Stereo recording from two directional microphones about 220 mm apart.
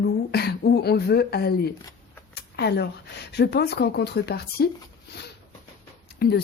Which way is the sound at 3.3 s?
50° left (ahead or behind).